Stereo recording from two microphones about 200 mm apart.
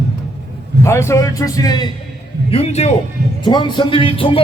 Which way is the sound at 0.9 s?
15° left (ahead or behind).